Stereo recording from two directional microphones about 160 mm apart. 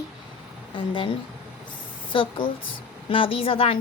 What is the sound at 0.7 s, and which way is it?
A woman's voice, 30° left (ahead or behind).